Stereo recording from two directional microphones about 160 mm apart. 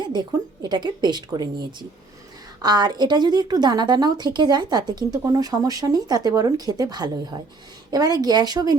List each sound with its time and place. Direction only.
0.0 s a woman's voice: 25° right (ahead or behind)